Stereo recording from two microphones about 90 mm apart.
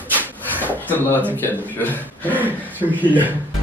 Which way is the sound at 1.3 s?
20° left (ahead or behind).